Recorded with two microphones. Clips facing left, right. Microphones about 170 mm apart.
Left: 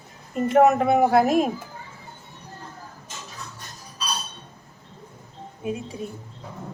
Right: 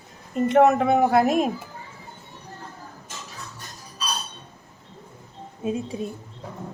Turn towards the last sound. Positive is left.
turn(degrees=-20)  # may be behind; listen again after turning